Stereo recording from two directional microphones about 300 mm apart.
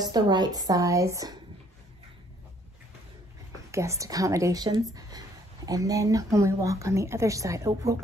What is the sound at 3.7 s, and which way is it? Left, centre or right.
Speech, centre.